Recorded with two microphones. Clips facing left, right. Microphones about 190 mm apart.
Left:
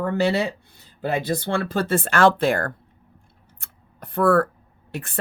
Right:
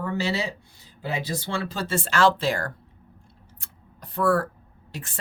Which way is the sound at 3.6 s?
55° left (ahead or behind).